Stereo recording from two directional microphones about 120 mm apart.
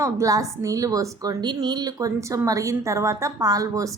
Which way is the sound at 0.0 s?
25° right (ahead or behind).